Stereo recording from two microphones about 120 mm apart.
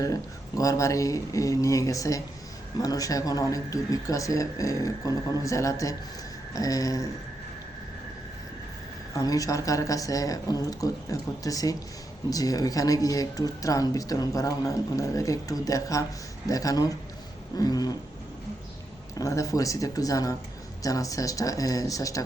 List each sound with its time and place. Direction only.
0.0 s speech: 30° left (ahead or behind)
9.1 s speech: 30° left (ahead or behind)
17.6 s a sound: 35° left (ahead or behind)
19.2 s speech: 25° left (ahead or behind)